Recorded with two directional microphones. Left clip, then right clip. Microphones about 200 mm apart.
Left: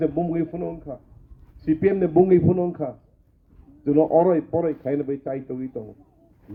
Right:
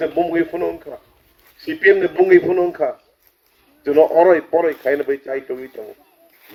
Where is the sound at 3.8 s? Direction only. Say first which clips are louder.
Right 6 dB; 50° right (ahead or behind).